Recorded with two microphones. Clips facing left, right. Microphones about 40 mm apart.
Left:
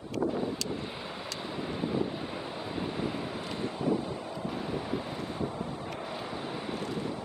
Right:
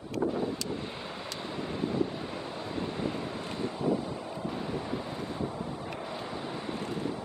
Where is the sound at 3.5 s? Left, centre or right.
Centre.